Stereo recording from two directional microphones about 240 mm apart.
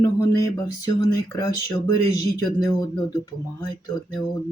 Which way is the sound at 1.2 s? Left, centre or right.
Centre.